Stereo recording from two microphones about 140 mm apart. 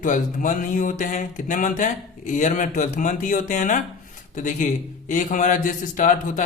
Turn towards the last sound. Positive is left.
turn(degrees=65)  # may be behind; listen again after turning